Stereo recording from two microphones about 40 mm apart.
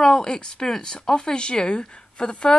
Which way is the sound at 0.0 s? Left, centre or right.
Centre.